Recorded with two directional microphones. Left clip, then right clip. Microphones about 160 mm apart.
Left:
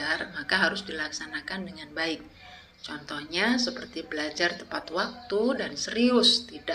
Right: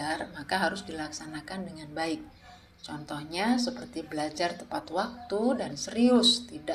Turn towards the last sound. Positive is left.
turn(degrees=-50)  # may be behind; listen again after turning